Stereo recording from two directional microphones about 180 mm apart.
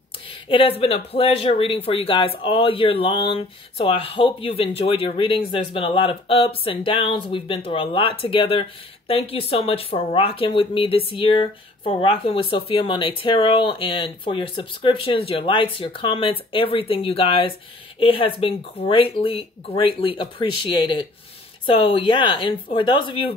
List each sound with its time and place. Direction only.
0.5 s speech: 30° left (ahead or behind)